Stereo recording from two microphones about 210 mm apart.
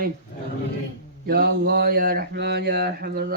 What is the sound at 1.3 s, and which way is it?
Speech, 45° right (ahead or behind).